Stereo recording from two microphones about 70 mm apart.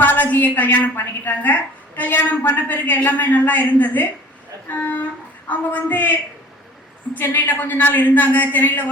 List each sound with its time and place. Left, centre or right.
0.0 s a woman's voice: left
7.1 s a woman's voice: left